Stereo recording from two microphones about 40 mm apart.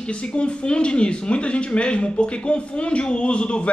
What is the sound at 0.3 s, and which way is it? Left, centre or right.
Speech, left.